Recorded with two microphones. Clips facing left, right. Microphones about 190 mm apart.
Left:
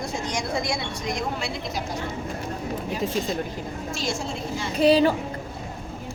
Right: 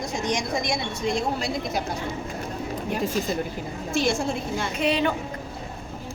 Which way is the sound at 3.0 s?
Centre (ahead or behind).